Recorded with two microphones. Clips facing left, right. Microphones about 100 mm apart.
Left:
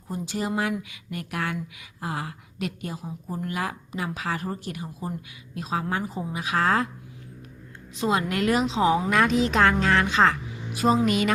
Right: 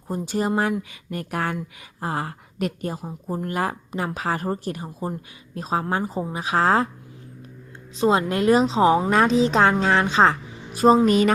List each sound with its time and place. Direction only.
0.1 s a woman's voice: 45° right (ahead or behind)
7.9 s a woman's voice: 30° right (ahead or behind)